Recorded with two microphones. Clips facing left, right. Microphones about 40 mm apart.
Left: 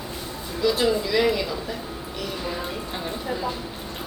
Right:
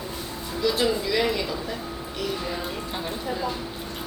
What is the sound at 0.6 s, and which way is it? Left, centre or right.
Speech, centre.